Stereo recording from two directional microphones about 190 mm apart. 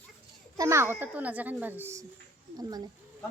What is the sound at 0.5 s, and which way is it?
A child's voice, 15° right (ahead or behind).